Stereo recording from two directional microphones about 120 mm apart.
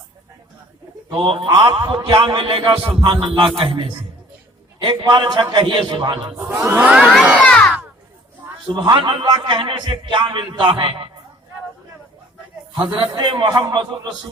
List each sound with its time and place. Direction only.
1.5 s a man's voice: 35° right (ahead or behind)
6.3 s speech: 25° right (ahead or behind)
6.8 s speech: 10° right (ahead or behind)
7.2 s crowd: 10° right (ahead or behind)
7.4 s a sound: 5° left (ahead or behind)
8.7 s a man's voice: 40° right (ahead or behind)
13.0 s a man's voice: 40° right (ahead or behind)